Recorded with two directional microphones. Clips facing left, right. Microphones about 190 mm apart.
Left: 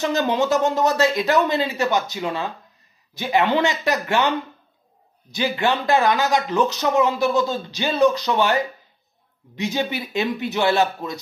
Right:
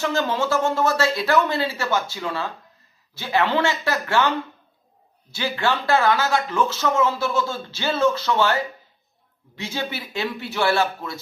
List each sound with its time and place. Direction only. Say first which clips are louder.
0.0 s speech: left 2 dB; 20° left (ahead or behind)
5.3 s speech: left 2 dB; 15° left (ahead or behind)